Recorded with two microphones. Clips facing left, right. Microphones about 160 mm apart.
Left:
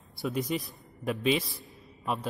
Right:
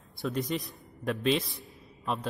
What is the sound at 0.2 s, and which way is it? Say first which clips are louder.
A man's voice: left 1 dB; centre (ahead or behind).